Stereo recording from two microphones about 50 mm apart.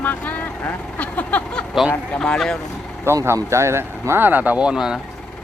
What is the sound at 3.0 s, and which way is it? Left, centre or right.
Speech, right.